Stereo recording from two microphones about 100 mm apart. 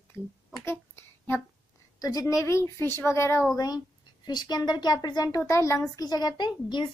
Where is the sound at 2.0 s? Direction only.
40° left (ahead or behind).